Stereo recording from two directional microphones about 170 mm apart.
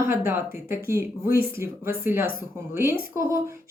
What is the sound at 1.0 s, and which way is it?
Speech, 60° left (ahead or behind).